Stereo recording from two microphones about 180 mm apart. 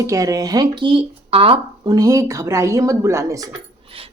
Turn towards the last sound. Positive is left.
turn(degrees=-15)  # may be behind; listen again after turning